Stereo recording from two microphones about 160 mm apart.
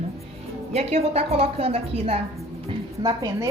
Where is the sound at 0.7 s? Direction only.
40° right (ahead or behind).